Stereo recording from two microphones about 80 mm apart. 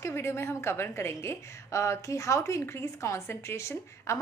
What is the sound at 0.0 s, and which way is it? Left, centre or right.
A woman's voice, left.